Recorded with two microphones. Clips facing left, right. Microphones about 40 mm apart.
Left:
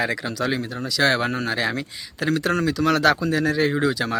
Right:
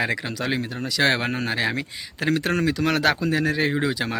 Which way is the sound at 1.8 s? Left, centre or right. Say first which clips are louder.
Even; right.